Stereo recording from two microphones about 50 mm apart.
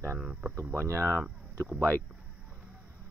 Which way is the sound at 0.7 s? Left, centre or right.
Right.